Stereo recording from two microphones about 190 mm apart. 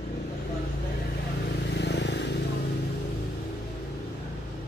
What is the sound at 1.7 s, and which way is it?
Vehicle, 65° left (ahead or behind).